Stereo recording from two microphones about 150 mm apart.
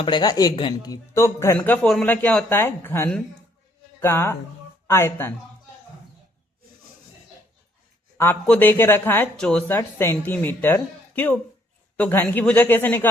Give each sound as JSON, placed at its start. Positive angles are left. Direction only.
{"t": 0.0, "sound": "speech", "side_deg": 30}
{"t": 8.2, "sound": "speech", "side_deg": 15}